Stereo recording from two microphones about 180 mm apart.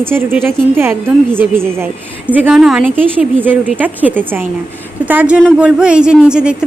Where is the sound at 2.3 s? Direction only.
10° right (ahead or behind).